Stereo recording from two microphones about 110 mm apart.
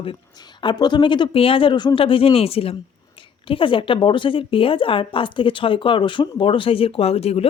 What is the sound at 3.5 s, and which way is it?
A woman's voice, 50° left (ahead or behind).